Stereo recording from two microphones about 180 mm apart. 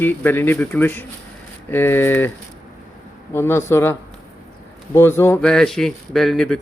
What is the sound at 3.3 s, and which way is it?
Speech, 15° left (ahead or behind).